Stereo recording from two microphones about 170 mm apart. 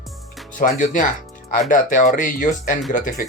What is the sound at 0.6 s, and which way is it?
Speech, 50° left (ahead or behind).